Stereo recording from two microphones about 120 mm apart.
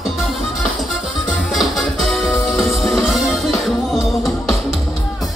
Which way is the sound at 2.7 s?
Centre (ahead or behind).